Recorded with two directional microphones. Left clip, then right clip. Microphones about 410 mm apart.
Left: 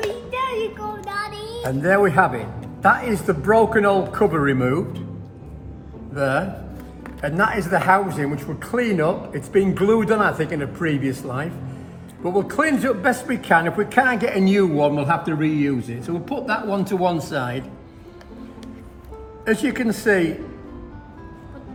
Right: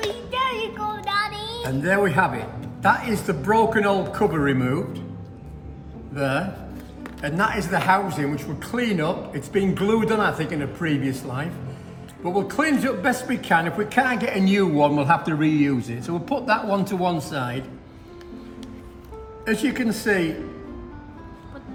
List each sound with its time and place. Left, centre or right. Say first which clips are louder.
0.0 s a child's voice: even; centre
6.1 s a man's voice: left 3 dB; centre
19.5 s a man's voice: left 3 dB; centre